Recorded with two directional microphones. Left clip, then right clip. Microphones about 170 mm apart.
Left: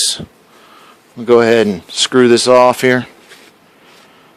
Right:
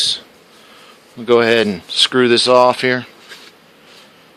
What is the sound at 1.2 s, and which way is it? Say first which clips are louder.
Speech: left 3 dB; 25° left (ahead or behind).